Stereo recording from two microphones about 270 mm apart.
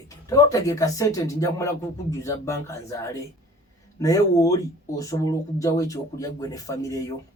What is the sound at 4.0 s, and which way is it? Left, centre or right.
Speech, centre.